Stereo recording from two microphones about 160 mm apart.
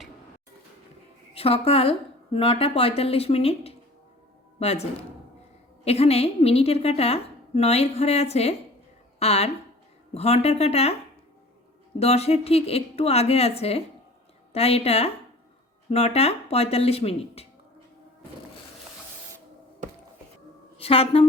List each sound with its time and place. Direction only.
1.3 s a woman's voice: 35° left (ahead or behind)
11.9 s a woman's voice: 40° left (ahead or behind)
20.7 s a woman's voice: 35° left (ahead or behind)